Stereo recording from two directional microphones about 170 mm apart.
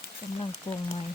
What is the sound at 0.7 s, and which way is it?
Speech, 30° left (ahead or behind).